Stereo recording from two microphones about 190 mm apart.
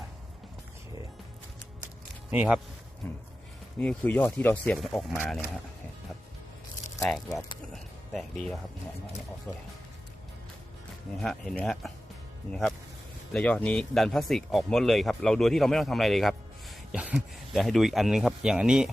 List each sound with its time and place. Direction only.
2.3 s speech: 5° right (ahead or behind)
3.0 s speech: 10° left (ahead or behind)
7.0 s speech: centre (ahead or behind)
11.2 s speech: 5° left (ahead or behind)